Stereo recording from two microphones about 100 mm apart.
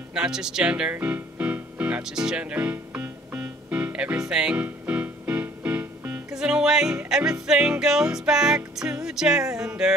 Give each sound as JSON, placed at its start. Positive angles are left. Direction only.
{"t": 0.1, "sound": "music", "side_deg": -5}